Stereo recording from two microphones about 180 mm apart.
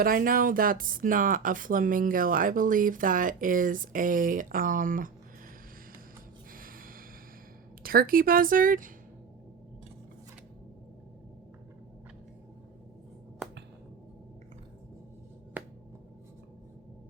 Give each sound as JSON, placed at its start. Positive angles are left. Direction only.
{"t": 0.0, "sound": "speech", "side_deg": -55}
{"t": 6.5, "sound": "gasp", "side_deg": -50}
{"t": 7.8, "sound": "speech", "side_deg": -55}
{"t": 15.6, "sound": "finger snapping", "side_deg": -10}